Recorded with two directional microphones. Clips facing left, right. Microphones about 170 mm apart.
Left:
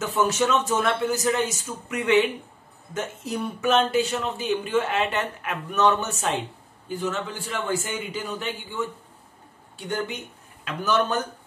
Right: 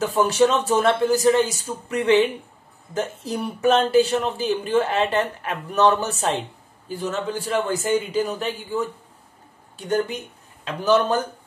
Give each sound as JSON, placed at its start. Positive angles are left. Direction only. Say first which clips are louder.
{"t": 0.0, "sound": "speech", "louder": "right 5 dB", "side_deg": -35}
{"t": 10.6, "sound": "speech", "louder": "right 5 dB", "side_deg": -30}